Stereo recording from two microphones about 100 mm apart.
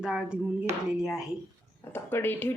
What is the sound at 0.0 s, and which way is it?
Hands, 5° right (ahead or behind).